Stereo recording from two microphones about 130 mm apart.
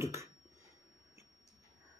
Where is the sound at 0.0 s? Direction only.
20° right (ahead or behind).